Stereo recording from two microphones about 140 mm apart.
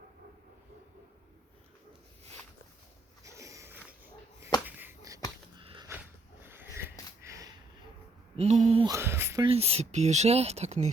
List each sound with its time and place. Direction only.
3.2 s a sound: 20° right (ahead or behind)
5.5 s sniff: 35° right (ahead or behind)
6.4 s a sound: 15° right (ahead or behind)
8.4 s speech: 50° right (ahead or behind)
8.9 s speech: 15° right (ahead or behind)
9.4 s speech: 45° right (ahead or behind)